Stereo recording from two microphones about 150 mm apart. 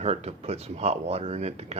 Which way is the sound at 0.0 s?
45° right (ahead or behind).